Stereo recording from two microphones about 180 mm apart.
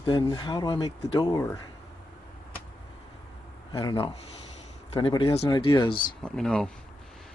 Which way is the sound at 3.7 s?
25° left (ahead or behind).